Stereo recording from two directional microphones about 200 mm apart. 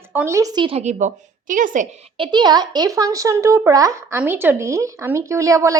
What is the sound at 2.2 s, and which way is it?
Speech, 20° right (ahead or behind).